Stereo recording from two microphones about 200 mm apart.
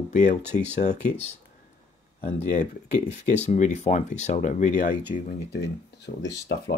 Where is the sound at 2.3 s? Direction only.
40° left (ahead or behind).